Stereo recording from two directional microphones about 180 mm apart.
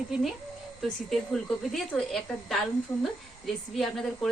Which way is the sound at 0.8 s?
Centre (ahead or behind).